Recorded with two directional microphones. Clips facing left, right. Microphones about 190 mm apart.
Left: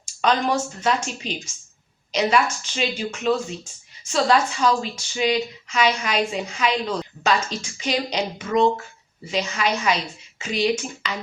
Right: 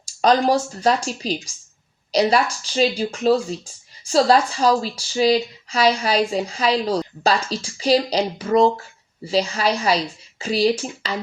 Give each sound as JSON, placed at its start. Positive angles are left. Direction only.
{"t": 0.0, "sound": "speech", "side_deg": -35}